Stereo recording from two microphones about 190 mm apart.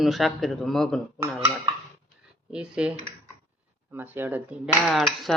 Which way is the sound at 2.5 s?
5° right (ahead or behind).